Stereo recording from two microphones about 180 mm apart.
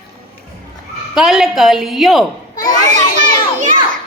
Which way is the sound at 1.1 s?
Centre (ahead or behind).